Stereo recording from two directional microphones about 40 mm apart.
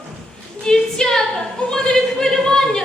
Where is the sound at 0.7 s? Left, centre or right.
Centre.